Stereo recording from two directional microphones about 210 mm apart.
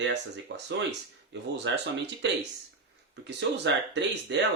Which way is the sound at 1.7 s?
55° right (ahead or behind).